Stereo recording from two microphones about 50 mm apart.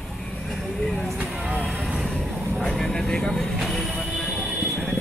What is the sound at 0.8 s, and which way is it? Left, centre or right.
Vehicle, centre.